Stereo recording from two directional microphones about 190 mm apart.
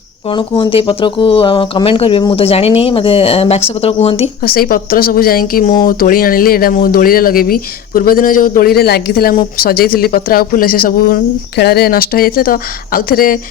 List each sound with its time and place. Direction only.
0.3 s speech: 25° left (ahead or behind)
4.4 s speech: 50° left (ahead or behind)